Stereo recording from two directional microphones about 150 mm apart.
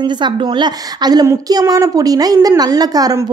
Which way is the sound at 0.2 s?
30° right (ahead or behind).